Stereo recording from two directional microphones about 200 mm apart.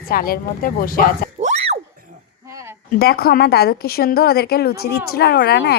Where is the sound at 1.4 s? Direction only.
35° right (ahead or behind).